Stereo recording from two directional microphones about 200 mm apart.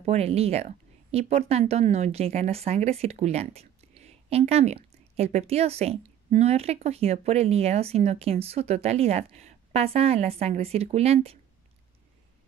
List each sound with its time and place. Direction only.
0.0 s speech: 30° right (ahead or behind)